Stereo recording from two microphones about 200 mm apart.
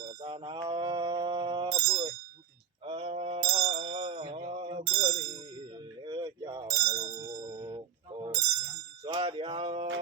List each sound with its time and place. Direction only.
0.0 s mantra: 20° right (ahead or behind)
2.8 s a sound: 30° right (ahead or behind)
8.2 s bicycle bell: 20° right (ahead or behind)
9.1 s music: 25° right (ahead or behind)